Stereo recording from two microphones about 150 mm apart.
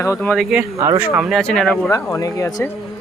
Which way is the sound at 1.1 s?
Centre (ahead or behind).